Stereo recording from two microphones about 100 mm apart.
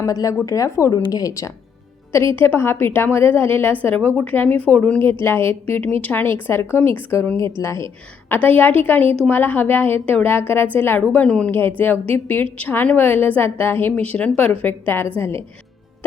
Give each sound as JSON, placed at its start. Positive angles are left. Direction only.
{"t": 0.0, "sound": "speech", "side_deg": 35}
{"t": 2.4, "sound": "a woman's voice", "side_deg": 25}
{"t": 7.3, "sound": "speech", "side_deg": -55}
{"t": 7.6, "sound": "a woman's voice", "side_deg": 30}
{"t": 8.3, "sound": "a woman's voice", "side_deg": 20}
{"t": 11.1, "sound": "a woman's voice", "side_deg": 10}